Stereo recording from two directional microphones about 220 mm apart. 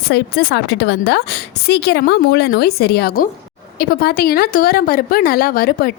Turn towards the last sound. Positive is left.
turn(degrees=40)  # may be behind; listen again after turning